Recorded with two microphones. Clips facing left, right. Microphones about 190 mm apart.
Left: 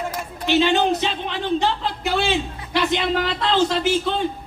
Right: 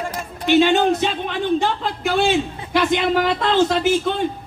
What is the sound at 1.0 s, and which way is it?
A man's voice, 50° right (ahead or behind).